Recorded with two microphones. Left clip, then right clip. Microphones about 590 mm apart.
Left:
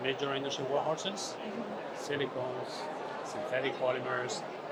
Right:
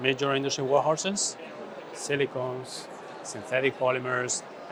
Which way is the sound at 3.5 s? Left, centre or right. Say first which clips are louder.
Right 7 dB; right.